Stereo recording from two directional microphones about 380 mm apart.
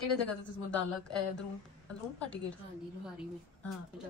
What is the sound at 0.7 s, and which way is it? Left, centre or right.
Speech, centre.